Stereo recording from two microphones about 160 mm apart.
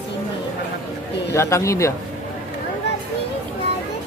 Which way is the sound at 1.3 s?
20° left (ahead or behind).